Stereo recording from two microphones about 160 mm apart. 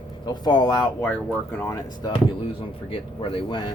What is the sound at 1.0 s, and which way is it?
Speech, 10° left (ahead or behind).